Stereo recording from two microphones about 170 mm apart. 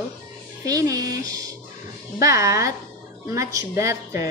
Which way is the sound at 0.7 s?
20° right (ahead or behind).